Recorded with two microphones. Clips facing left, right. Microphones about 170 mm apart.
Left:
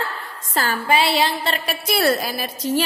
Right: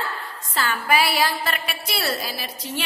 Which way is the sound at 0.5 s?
40° left (ahead or behind).